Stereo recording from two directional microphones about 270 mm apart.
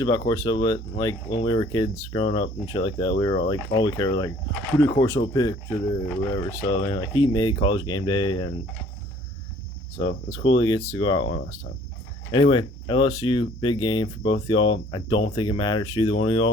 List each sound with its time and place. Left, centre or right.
0.0 s speech: centre
10.0 s speech: centre